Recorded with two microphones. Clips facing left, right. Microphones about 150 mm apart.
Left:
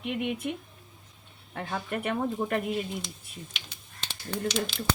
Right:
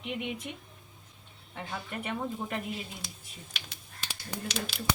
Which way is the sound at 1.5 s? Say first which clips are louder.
Left 6 dB; 55° left (ahead or behind).